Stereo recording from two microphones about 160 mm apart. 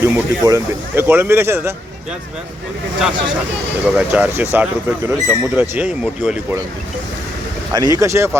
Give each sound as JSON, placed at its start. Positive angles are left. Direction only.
{"t": 0.0, "sound": "speech", "side_deg": -20}
{"t": 3.8, "sound": "speech", "side_deg": -5}
{"t": 7.7, "sound": "speech", "side_deg": -25}